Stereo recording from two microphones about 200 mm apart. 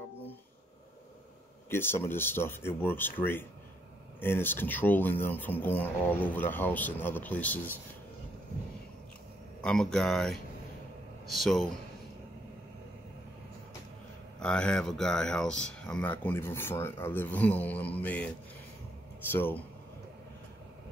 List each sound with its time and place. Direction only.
1.7 s speech: 10° left (ahead or behind)
9.6 s speech: 5° left (ahead or behind)
14.4 s speech: 5° left (ahead or behind)
19.3 s speech: 10° left (ahead or behind)